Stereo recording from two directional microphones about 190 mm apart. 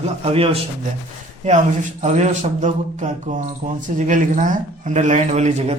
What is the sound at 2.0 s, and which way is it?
A man's voice, 35° right (ahead or behind).